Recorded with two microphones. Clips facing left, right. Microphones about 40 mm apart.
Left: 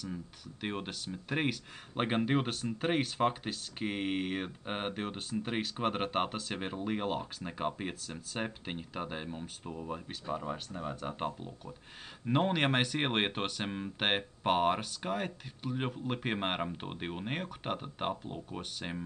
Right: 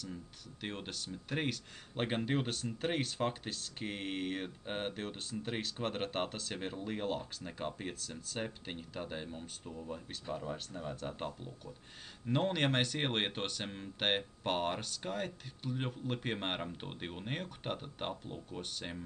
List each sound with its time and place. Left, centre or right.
0.0 s speech: centre